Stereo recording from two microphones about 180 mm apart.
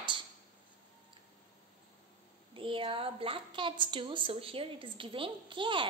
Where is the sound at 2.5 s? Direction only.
30° right (ahead or behind).